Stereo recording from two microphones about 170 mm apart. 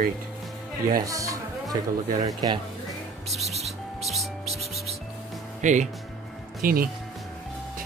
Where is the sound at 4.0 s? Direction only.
Centre (ahead or behind).